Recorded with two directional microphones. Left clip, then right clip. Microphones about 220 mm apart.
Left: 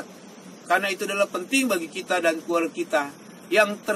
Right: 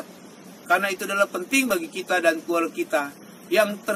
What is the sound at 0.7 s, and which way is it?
A man's voice, 5° right (ahead or behind).